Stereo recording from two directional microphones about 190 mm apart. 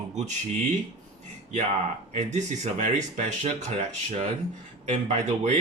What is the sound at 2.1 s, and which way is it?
Speech, 40° right (ahead or behind).